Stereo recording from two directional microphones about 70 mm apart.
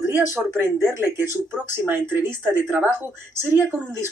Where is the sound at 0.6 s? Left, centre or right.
Right.